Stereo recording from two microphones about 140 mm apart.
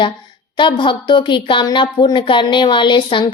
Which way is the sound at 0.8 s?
35° left (ahead or behind).